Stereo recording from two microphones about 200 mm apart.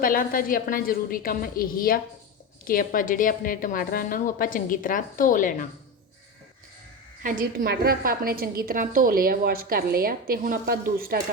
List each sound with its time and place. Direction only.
0.0 s a woman's voice: 45° left (ahead or behind)
7.2 s a woman's voice: 45° right (ahead or behind)